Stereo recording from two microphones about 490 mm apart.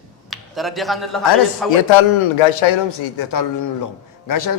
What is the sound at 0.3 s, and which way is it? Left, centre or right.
Speech, centre.